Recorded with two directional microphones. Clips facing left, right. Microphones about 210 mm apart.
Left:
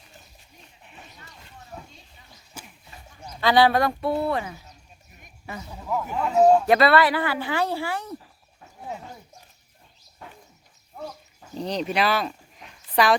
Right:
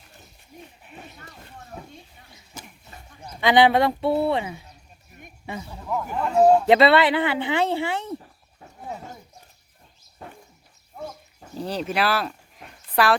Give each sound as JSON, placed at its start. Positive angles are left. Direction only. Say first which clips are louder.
{"t": 1.2, "sound": "a sound", "louder": "right 4 dB", "side_deg": -55}
{"t": 3.4, "sound": "speech", "louder": "right 2 dB", "side_deg": -20}
{"t": 5.7, "sound": "speech", "louder": "left 1 dB", "side_deg": 5}
{"t": 6.7, "sound": "speech", "louder": "right 2 dB", "side_deg": -25}
{"t": 11.5, "sound": "speech", "louder": "left 1 dB", "side_deg": -5}